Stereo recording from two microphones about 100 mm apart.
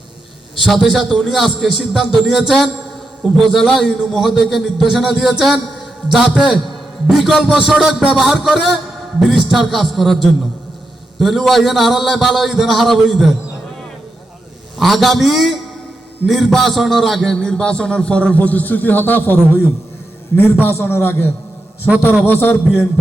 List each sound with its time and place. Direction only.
0.6 s a man's voice: centre (ahead or behind)
11.2 s a man's voice: centre (ahead or behind)
14.8 s a man's voice: centre (ahead or behind); by 22.9 s 25° left (ahead or behind)